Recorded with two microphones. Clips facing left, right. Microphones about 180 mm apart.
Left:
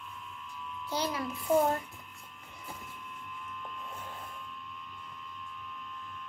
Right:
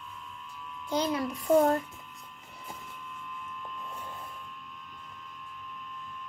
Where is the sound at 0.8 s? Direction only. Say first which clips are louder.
Right 4 dB; 10° left (ahead or behind).